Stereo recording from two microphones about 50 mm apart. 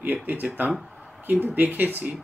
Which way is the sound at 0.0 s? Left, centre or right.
Right.